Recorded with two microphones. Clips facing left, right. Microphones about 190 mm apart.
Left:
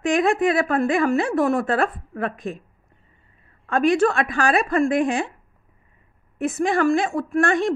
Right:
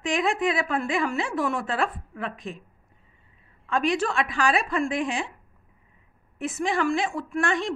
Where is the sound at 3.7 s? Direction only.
50° left (ahead or behind).